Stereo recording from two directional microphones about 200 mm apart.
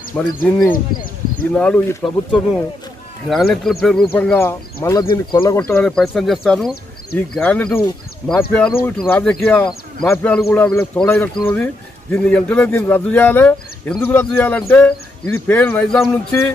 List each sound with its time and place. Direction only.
0.1 s a man's voice: 5° left (ahead or behind)
3.3 s a man's voice: centre (ahead or behind)
5.1 s speech: 20° left (ahead or behind)
5.6 s a man's voice: 5° left (ahead or behind)